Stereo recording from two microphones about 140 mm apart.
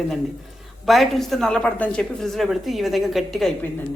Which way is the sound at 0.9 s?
Centre (ahead or behind).